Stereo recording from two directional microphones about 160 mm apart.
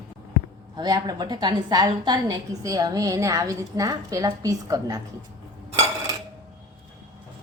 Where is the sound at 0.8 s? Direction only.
25° right (ahead or behind).